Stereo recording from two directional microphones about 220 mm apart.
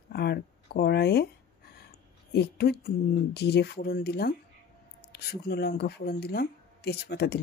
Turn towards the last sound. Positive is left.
turn(degrees=50)  # may be behind; listen again after turning